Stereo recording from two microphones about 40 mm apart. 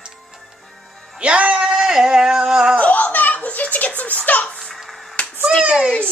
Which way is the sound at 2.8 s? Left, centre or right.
Left.